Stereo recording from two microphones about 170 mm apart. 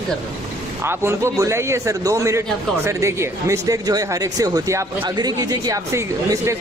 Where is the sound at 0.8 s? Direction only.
15° right (ahead or behind).